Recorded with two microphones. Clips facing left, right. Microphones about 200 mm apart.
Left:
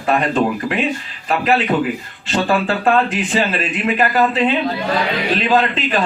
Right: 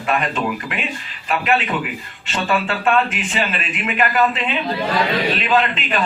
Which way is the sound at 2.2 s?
35° left (ahead or behind).